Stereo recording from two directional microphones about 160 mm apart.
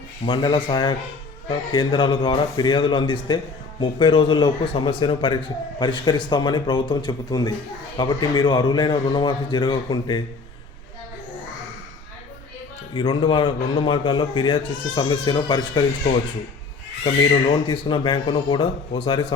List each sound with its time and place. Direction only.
0.3 s a man's voice: 25° left (ahead or behind)
12.9 s a man's voice: 30° left (ahead or behind)
17.0 s a man's voice: 30° left (ahead or behind)